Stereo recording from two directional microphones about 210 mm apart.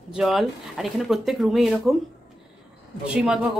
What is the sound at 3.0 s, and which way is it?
Speech, 5° right (ahead or behind).